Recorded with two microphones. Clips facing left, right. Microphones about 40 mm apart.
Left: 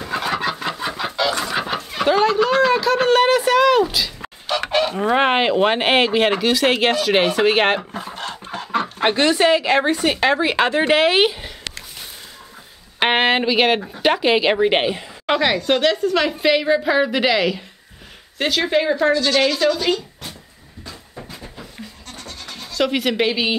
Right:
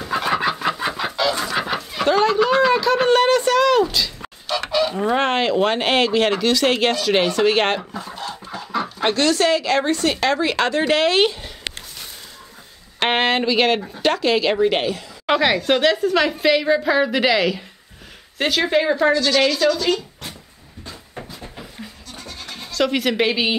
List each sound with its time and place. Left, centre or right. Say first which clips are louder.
0.1 s chicken: right 2 dB; centre
1.4 s speech: even; centre
4.6 s chicken: even; left
4.9 s speech: left 2 dB; centre
8.1 s chicken: left 1 dB; left
9.0 s speech: left 2 dB; centre
13.0 s speech: left 2 dB; centre
14.1 s speech: left 2 dB; left
15.2 s a woman's voice: right 1 dB; centre
22.7 s a woman's voice: even; centre